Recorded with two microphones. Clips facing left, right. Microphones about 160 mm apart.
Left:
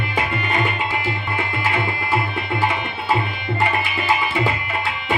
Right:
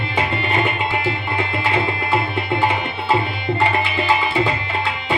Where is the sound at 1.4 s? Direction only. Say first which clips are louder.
Right 2 dB; 20° right (ahead or behind).